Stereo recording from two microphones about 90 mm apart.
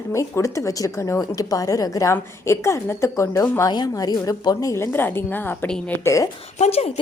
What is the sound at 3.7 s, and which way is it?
A woman's voice, 50° left (ahead or behind).